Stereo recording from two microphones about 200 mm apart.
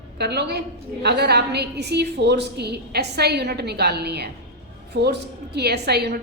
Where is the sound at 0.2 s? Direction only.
55° right (ahead or behind).